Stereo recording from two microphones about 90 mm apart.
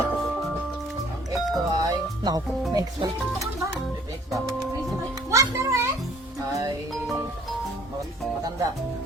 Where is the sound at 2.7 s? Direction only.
40° right (ahead or behind).